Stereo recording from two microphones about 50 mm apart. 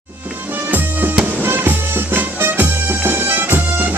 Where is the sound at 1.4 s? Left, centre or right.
Right.